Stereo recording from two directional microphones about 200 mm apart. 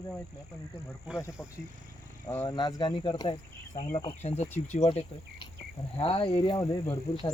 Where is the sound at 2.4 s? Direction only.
20° left (ahead or behind).